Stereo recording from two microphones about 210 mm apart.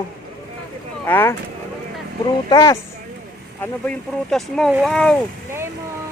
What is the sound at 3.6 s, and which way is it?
Speech, 5° left (ahead or behind).